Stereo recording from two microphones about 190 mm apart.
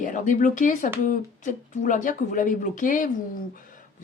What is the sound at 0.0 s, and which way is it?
Speech, 40° left (ahead or behind).